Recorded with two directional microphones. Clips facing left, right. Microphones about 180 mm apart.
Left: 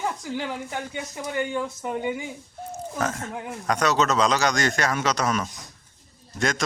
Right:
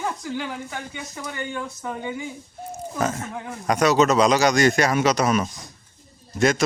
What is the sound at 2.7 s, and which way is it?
A man's voice, 10° right (ahead or behind).